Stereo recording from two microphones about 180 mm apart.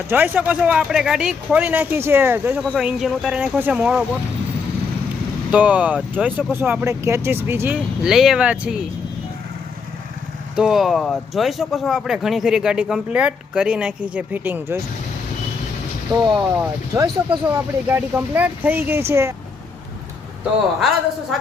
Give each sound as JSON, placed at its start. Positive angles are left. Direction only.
{"t": 0.1, "sound": "speech", "side_deg": -10}
{"t": 2.6, "sound": "speech", "side_deg": 0}
{"t": 5.5, "sound": "speech", "side_deg": -10}
{"t": 10.5, "sound": "speech", "side_deg": -5}
{"t": 16.1, "sound": "speech", "side_deg": -20}